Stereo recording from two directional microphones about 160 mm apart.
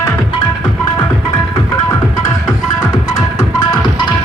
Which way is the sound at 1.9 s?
20° left (ahead or behind).